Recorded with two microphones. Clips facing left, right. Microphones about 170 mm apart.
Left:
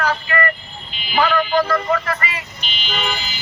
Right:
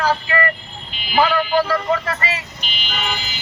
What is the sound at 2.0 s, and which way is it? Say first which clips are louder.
Speech: even; 30° right (ahead or behind).